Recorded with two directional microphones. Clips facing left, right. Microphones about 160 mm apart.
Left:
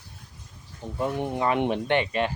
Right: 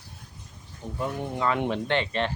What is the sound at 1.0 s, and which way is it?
Speech, 20° left (ahead or behind).